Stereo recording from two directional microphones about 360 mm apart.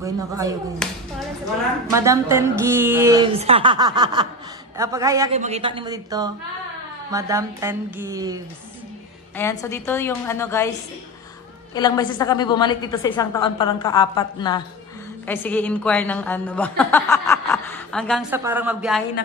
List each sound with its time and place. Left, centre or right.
0.8 s a woman's voice: centre
9.4 s a woman's voice: centre
11.7 s a woman's voice: centre